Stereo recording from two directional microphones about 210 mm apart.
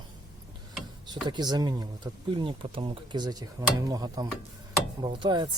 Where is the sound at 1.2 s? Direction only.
20° right (ahead or behind).